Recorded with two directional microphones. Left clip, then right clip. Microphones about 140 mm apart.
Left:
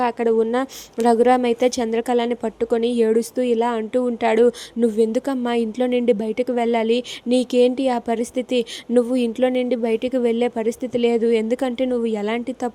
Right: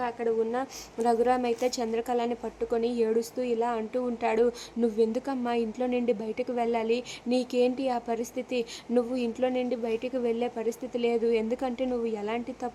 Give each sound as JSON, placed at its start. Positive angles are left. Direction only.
{"t": 0.0, "sound": "a woman's voice", "side_deg": 55}